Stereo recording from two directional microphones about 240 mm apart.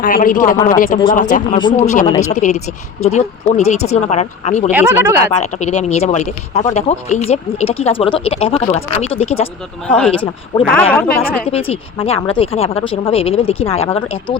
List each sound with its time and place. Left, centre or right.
0.0 s speech: left
1.5 s speech: centre
4.7 s speech: centre
5.4 s speech: left
9.8 s a woman's voice: centre
11.4 s speech: left